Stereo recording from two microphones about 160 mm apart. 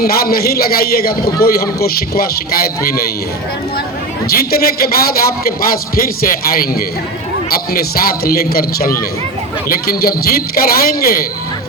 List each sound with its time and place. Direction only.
0.0 s a man's voice: 70° left (ahead or behind)
4.3 s a man's voice: 70° left (ahead or behind)